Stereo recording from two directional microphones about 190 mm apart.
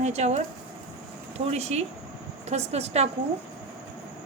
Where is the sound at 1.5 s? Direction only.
35° right (ahead or behind).